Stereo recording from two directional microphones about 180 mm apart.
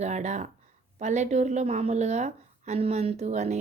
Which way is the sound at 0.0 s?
40° right (ahead or behind).